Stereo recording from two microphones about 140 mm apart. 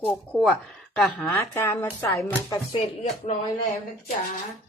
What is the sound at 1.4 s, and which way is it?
Speech, 15° left (ahead or behind).